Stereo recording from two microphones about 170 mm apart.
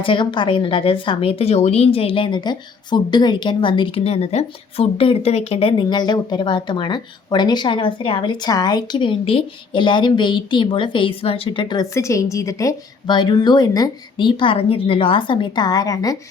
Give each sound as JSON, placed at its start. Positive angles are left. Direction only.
{"t": 0.0, "sound": "speech", "side_deg": 30}